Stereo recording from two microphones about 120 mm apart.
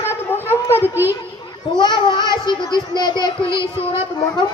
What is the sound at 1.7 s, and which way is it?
A child's voice, 40° left (ahead or behind).